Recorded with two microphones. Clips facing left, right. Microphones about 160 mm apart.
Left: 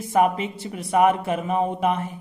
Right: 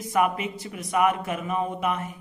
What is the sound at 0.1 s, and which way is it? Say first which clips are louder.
A man's voice: left 4 dB; 30° left (ahead or behind).